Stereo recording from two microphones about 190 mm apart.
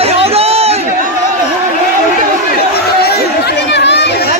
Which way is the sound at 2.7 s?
55° left (ahead or behind).